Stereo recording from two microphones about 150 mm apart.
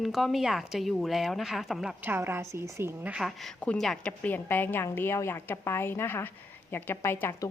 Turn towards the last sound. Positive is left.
turn(degrees=15)  # may be behind; listen again after turning